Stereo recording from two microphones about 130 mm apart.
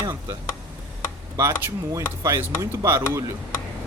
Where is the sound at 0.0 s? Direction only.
25° right (ahead or behind).